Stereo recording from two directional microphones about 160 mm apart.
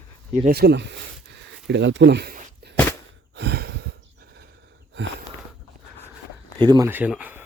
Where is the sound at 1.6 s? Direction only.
90° right.